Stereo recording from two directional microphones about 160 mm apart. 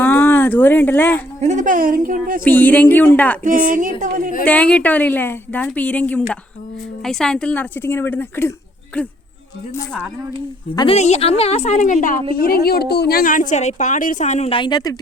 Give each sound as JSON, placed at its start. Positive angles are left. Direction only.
{"t": 0.0, "sound": "a sound", "side_deg": 15}
{"t": 1.4, "sound": "a woman's voice", "side_deg": -50}
{"t": 2.4, "sound": "a woman's voice", "side_deg": 10}
{"t": 3.4, "sound": "a woman's voice", "side_deg": -55}
{"t": 4.4, "sound": "a woman's voice", "side_deg": 5}
{"t": 10.8, "sound": "a woman's voice", "side_deg": 40}
{"t": 12.3, "sound": "speech", "side_deg": 65}
{"t": 14.6, "sound": "speech", "side_deg": 25}